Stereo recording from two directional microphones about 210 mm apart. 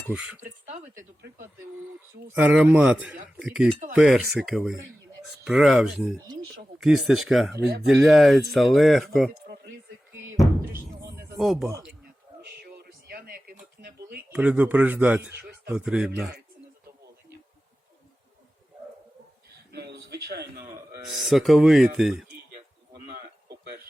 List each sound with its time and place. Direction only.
0.1 s speech: 5° right (ahead or behind)
2.3 s speech: 5° right (ahead or behind)
11.3 s speech: centre (ahead or behind)
12.4 s a sound: 50° right (ahead or behind)
14.3 s speech: 5° right (ahead or behind)
19.7 s a sound: 50° right (ahead or behind)
21.2 s speech: centre (ahead or behind)